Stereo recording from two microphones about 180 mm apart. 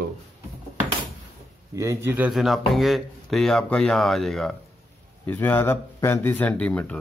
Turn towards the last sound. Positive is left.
turn(degrees=10)  # may be behind; listen again after turning